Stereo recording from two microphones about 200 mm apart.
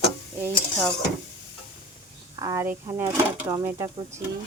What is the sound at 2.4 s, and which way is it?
Speech, 15° right (ahead or behind).